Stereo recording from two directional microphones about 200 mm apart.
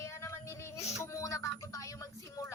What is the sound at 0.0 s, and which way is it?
Music, 15° left (ahead or behind).